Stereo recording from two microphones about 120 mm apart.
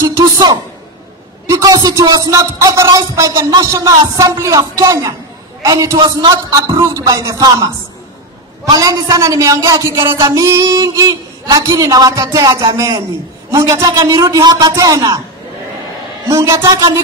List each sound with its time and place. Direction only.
0.0 s a man's voice: 25° right (ahead or behind)
16.3 s speech: 30° right (ahead or behind)